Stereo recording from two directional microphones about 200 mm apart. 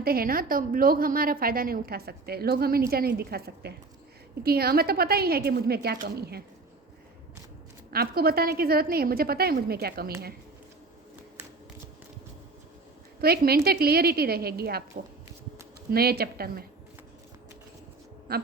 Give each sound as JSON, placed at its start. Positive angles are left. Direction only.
{"t": 0.0, "sound": "a woman's voice", "side_deg": -50}
{"t": 7.9, "sound": "a woman's voice", "side_deg": -50}
{"t": 13.2, "sound": "a woman's voice", "side_deg": -50}
{"t": 15.9, "sound": "a woman's voice", "side_deg": -50}
{"t": 18.3, "sound": "a woman's voice", "side_deg": -50}